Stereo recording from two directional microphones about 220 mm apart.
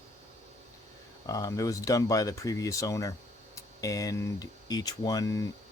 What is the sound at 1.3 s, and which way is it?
Speech, 15° left (ahead or behind).